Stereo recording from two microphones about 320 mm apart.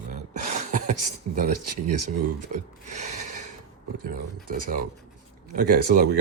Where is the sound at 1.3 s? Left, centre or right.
Right.